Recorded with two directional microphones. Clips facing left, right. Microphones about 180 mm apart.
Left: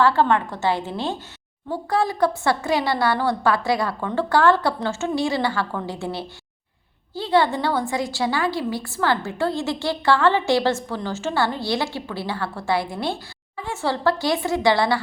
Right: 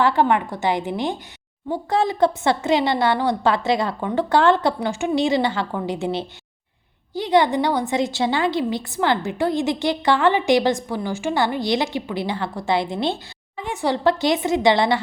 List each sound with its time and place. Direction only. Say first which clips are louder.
0.0 s a woman's voice: even; 15° right (ahead or behind)